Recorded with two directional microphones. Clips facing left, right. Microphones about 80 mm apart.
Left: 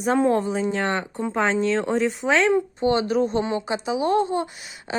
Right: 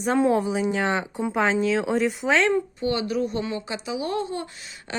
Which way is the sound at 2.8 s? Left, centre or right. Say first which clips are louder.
Left 4 dB; left.